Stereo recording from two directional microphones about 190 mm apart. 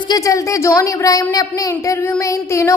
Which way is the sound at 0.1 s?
15° left (ahead or behind).